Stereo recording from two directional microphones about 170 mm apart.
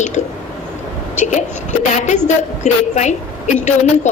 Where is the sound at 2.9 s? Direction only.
45° left (ahead or behind).